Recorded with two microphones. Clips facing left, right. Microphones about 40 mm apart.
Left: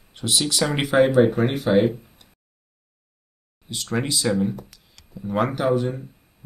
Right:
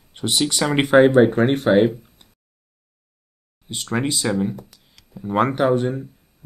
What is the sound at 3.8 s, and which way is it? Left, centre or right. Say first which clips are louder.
Speech: right 1 dB; centre.